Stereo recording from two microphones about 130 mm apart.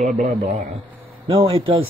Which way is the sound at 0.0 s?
65° right (ahead or behind).